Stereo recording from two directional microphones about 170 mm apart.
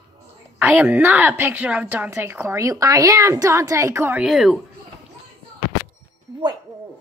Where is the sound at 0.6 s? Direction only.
10° right (ahead or behind).